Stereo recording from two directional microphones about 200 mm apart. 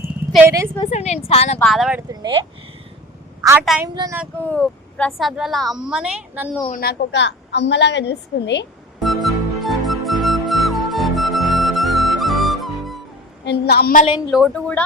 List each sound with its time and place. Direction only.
0.4 s a woman's voice: 15° right (ahead or behind)
0.8 s a woman's voice: 35° left (ahead or behind)
1.5 s a woman's voice: centre (ahead or behind)
2.2 s speech: 25° right (ahead or behind)
3.9 s a woman's voice: 20° right (ahead or behind)
4.4 s a woman's voice: 5° left (ahead or behind)
6.7 s a woman's voice: 50° left (ahead or behind)
9.0 s music: centre (ahead or behind)
13.4 s a woman's voice: 55° left (ahead or behind)
14.3 s a woman's voice: centre (ahead or behind)